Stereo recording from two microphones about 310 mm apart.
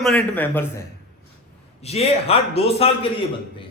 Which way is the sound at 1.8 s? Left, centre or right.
Centre.